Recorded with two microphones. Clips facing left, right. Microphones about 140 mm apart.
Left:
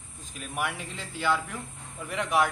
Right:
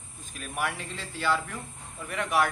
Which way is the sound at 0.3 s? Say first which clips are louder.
Even; 15° left (ahead or behind).